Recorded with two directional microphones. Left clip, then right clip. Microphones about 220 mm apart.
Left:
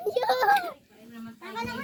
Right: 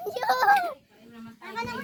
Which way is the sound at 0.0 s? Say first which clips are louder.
Even; 40° right (ahead or behind).